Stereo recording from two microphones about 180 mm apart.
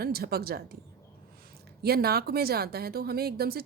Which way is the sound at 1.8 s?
60° right (ahead or behind).